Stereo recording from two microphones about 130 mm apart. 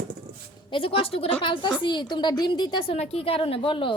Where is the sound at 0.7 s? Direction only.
45° left (ahead or behind).